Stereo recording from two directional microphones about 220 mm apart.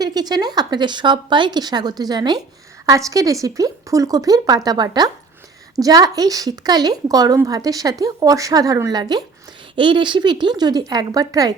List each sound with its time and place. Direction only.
0.0 s a woman's voice: 20° right (ahead or behind)